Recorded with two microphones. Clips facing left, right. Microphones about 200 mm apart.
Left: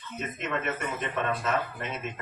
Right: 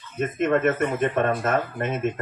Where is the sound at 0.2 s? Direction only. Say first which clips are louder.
Right 12 dB; 50° right (ahead or behind).